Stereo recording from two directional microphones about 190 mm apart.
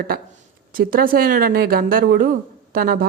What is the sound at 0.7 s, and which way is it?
Speech, 50° right (ahead or behind).